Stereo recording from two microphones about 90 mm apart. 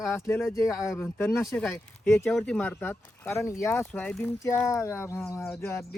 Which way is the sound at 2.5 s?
15° left (ahead or behind).